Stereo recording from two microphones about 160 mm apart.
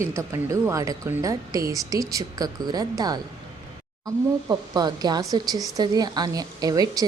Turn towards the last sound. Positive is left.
turn(degrees=-25)  # may be behind; listen again after turning